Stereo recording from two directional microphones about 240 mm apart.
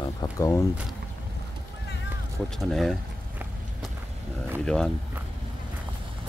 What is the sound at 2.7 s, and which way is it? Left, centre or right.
Speech, centre.